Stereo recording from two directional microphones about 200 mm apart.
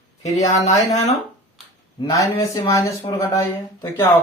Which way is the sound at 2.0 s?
15° left (ahead or behind).